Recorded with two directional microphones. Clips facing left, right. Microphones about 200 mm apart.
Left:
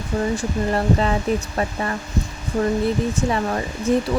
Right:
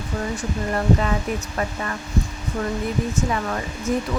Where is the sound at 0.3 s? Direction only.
30° left (ahead or behind).